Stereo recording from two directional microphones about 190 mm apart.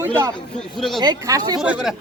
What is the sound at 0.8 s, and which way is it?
Speech, centre (ahead or behind).